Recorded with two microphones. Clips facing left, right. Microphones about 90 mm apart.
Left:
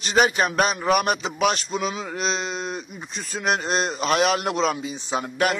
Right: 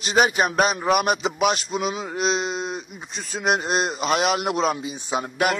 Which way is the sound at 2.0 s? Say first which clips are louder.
Right 3 dB; 5° right (ahead or behind).